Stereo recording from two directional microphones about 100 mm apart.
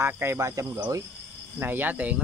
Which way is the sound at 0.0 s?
25° right (ahead or behind).